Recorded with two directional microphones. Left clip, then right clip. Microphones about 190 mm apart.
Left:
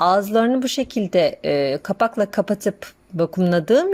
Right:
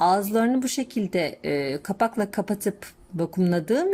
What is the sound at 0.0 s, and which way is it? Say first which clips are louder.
Speech: left 4 dB; 20° left (ahead or behind).